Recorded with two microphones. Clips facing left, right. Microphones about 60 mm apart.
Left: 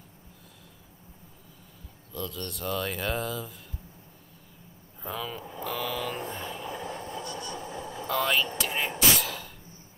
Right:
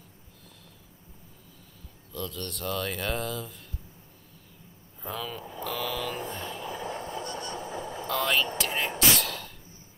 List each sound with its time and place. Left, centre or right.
2.1 s speech: centre
5.0 s vehicle: centre
7.1 s train: right
8.0 s speech: centre
8.5 s a sound: centre